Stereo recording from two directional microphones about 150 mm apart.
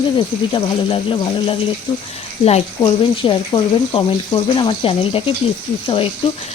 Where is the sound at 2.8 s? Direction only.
30° left (ahead or behind).